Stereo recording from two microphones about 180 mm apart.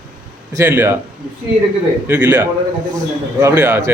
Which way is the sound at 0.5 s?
15° right (ahead or behind).